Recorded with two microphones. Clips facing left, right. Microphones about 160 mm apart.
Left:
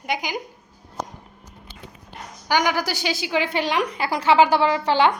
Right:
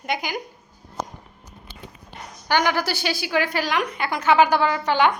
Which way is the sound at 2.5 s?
15° left (ahead or behind).